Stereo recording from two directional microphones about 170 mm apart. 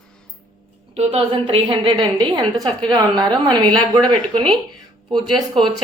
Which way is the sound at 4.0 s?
5° left (ahead or behind).